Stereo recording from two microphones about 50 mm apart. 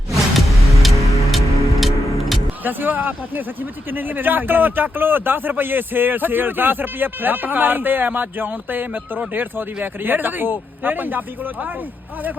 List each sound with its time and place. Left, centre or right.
0.1 s car: centre
0.8 s music: centre
2.6 s speech: right